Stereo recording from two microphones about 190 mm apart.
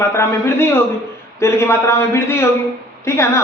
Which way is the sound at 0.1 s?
15° left (ahead or behind).